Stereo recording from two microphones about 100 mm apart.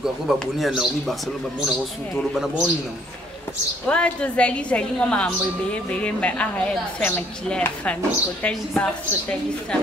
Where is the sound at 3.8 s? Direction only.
10° left (ahead or behind).